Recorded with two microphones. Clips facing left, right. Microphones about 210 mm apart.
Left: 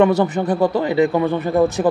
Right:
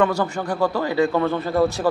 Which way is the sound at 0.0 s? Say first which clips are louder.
Left 6 dB; 20° left (ahead or behind).